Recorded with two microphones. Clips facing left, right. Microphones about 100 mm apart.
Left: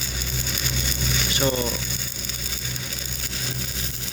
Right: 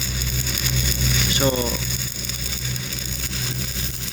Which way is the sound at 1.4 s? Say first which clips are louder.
Right 2 dB; 10° right (ahead or behind).